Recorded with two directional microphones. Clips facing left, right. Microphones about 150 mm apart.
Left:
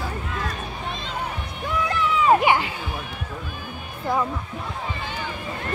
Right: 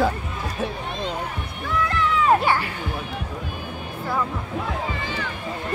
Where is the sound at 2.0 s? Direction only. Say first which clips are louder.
Left 1 dB; 15° left (ahead or behind).